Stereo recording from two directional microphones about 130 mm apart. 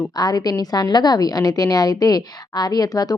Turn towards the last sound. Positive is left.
turn(degrees=30)  # may be behind; listen again after turning